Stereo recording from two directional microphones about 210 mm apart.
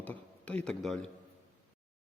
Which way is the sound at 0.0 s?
5° left (ahead or behind).